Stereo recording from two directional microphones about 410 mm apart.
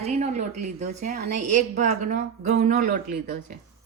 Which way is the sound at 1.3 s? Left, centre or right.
Right.